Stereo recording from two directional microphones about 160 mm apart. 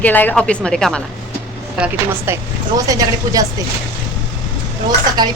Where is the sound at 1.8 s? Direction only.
15° right (ahead or behind).